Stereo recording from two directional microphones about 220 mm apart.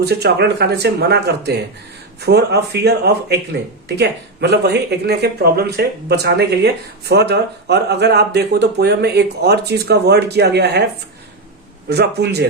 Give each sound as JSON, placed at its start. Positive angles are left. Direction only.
{"t": 0.0, "sound": "speech", "side_deg": -50}
{"t": 11.9, "sound": "speech", "side_deg": -50}